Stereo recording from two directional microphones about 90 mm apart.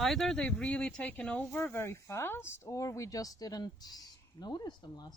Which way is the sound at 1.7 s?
30° left (ahead or behind).